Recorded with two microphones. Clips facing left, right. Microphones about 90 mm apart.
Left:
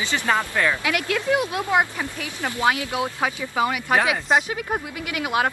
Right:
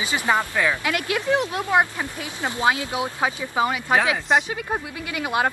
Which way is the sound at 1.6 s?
20° right (ahead or behind).